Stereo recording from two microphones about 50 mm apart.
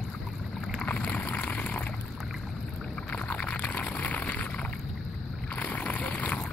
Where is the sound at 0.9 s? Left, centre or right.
Left.